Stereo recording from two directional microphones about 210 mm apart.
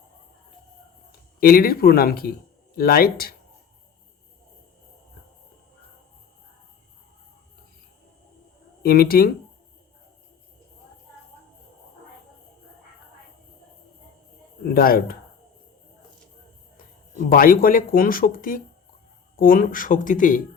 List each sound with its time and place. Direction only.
1.4 s speech: 45° left (ahead or behind)
8.8 s speech: 45° left (ahead or behind)
14.6 s speech: 45° left (ahead or behind)
16.7 s speech: 45° left (ahead or behind)